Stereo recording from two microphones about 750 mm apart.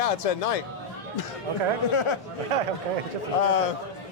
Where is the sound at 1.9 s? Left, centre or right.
Left.